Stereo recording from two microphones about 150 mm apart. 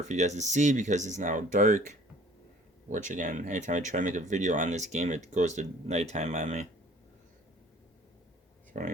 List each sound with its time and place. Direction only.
0.0 s speech: 55° right (ahead or behind)
8.7 s speech: 60° right (ahead or behind)